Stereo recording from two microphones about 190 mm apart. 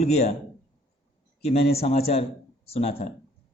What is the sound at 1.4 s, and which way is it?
A man's voice, 35° left (ahead or behind).